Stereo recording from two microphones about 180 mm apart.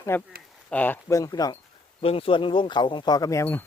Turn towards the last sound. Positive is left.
turn(degrees=10)  # may be behind; listen again after turning